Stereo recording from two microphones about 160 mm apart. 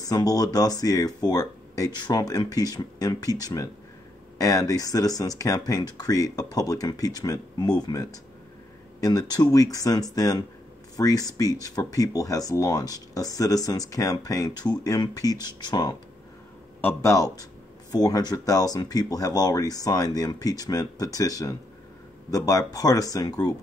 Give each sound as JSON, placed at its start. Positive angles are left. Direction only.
{"t": 0.0, "sound": "speech", "side_deg": 25}